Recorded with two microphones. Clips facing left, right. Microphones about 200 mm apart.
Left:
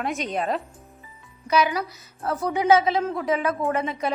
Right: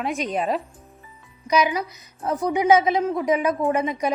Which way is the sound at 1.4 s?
15° right (ahead or behind).